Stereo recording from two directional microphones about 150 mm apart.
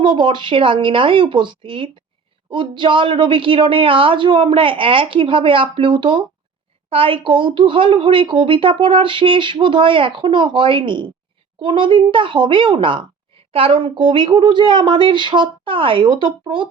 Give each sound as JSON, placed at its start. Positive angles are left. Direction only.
{"t": 0.0, "sound": "speech", "side_deg": -30}